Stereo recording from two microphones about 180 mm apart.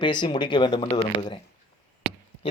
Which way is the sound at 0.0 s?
25° left (ahead or behind).